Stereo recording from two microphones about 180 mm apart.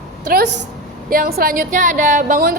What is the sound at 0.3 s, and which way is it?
Speech, 65° right (ahead or behind).